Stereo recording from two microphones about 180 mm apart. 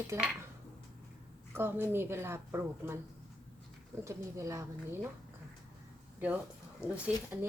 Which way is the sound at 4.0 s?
15° right (ahead or behind).